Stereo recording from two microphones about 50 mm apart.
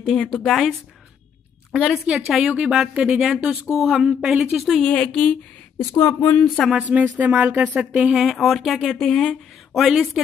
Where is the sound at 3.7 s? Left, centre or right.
Centre.